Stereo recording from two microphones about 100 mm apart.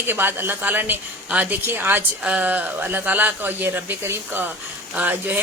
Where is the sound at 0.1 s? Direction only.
20° right (ahead or behind).